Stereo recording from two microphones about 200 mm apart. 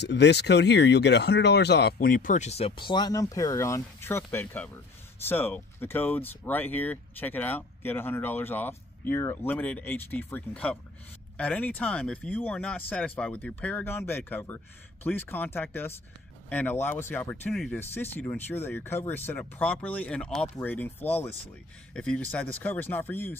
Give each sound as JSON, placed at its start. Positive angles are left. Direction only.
{"t": 0.0, "sound": "speech", "side_deg": 60}